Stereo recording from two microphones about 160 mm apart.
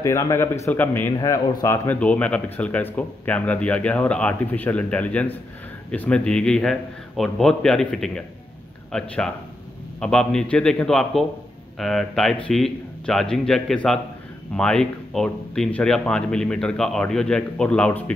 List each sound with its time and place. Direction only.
0.0 s speech: 20° left (ahead or behind)
1.1 s speech: 20° left (ahead or behind)